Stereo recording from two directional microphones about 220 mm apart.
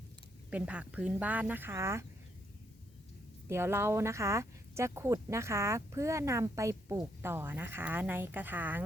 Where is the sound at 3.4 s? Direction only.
10° right (ahead or behind).